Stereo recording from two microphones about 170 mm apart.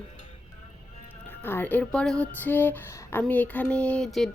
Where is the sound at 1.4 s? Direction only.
10° left (ahead or behind).